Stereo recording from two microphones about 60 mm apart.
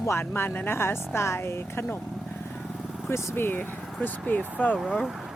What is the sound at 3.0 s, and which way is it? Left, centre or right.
Speech, left.